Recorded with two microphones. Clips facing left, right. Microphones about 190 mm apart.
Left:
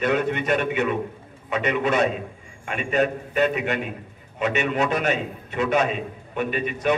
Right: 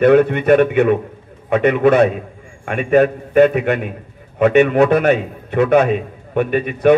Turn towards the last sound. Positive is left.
turn(degrees=-55)  # may be behind; listen again after turning